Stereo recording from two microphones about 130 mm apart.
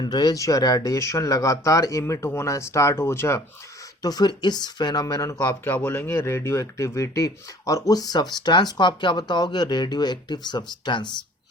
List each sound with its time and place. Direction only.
0.0 s speech: 30° left (ahead or behind)
4.0 s speech: 30° left (ahead or behind)
5.6 s speech: 15° left (ahead or behind); by 11.1 s 35° left (ahead or behind)